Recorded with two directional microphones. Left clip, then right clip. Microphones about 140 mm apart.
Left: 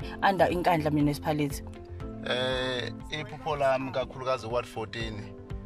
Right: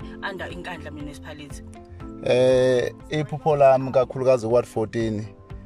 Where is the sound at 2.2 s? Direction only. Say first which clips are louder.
Right 12 dB; 45° right (ahead or behind).